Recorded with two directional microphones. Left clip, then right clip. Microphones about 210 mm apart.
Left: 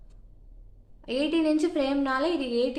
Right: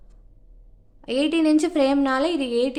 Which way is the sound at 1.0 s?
45° right (ahead or behind).